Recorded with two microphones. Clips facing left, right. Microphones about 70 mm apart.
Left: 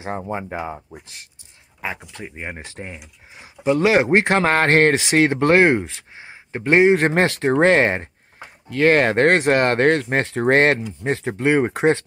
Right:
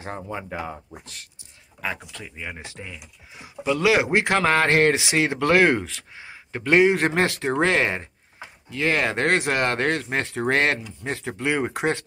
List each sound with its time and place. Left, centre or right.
0.1 s speech: left
2.1 s speech: left